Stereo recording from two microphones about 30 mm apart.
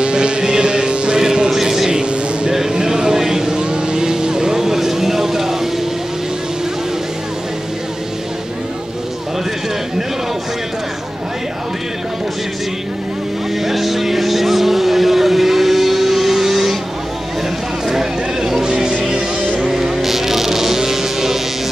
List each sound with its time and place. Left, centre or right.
0.0 s music: right
1.5 s vehicle: centre
1.9 s vehicle: right; by 5.6 s centre
13.7 s vehicle: centre
17.8 s a sound: centre
19.0 s music: right
19.7 s insect: centre